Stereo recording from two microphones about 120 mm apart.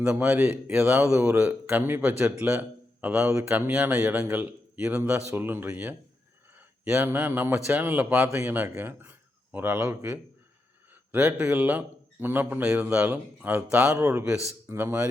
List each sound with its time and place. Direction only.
0.0 s a man's voice: 15° right (ahead or behind)
0.9 s a man's voice: 10° right (ahead or behind)